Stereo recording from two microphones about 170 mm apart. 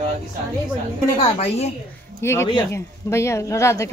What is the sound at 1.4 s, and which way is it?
Speech, 35° left (ahead or behind).